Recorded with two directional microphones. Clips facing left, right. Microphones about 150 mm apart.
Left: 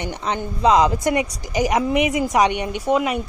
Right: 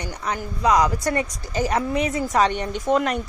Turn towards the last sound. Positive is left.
turn(degrees=5)  # may be behind; listen again after turning